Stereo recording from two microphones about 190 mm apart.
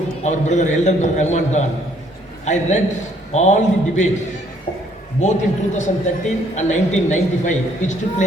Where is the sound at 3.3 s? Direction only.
35° left (ahead or behind).